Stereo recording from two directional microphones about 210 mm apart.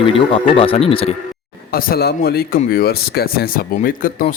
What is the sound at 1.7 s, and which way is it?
Speech, 45° left (ahead or behind).